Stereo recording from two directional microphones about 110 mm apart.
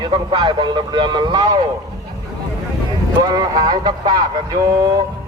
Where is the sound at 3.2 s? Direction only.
35° right (ahead or behind).